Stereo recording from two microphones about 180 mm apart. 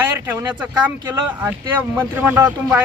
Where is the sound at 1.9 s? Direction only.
10° right (ahead or behind).